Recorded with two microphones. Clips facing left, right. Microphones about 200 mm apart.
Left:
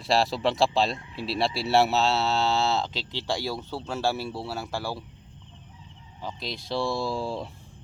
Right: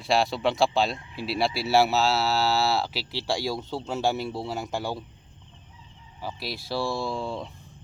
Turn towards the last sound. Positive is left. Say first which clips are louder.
# left 1 dB
turn(degrees=5)  # may be behind; listen again after turning